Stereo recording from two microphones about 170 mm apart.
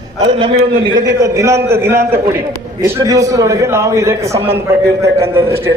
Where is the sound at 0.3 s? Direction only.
30° right (ahead or behind).